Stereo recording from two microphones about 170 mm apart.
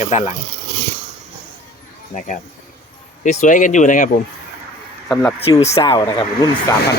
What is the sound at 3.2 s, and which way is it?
Speech, 45° left (ahead or behind).